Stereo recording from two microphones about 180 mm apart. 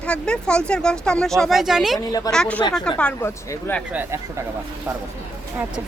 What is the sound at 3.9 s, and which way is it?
Speech, 15° right (ahead or behind).